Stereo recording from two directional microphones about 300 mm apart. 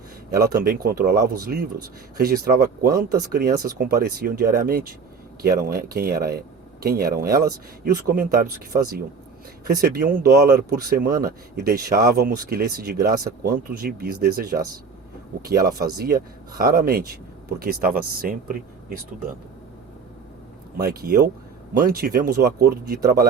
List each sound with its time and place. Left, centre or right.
0.5 s speech: right
20.7 s speech: right